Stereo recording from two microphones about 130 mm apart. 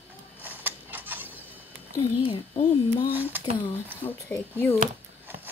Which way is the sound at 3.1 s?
15° right (ahead or behind).